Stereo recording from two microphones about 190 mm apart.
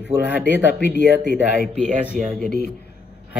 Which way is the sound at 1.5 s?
60° left (ahead or behind).